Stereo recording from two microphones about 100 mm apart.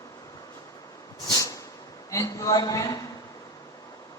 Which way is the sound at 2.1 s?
35° left (ahead or behind).